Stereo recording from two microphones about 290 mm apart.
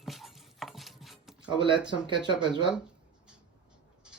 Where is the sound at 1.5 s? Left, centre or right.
Centre.